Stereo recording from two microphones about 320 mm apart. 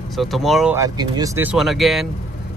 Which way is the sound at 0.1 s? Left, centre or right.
Centre.